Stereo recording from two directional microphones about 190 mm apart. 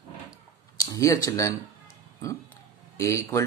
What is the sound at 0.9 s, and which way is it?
Speech, 15° left (ahead or behind).